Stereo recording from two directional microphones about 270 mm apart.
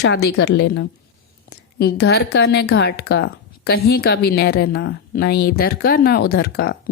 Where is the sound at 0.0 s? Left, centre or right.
Left.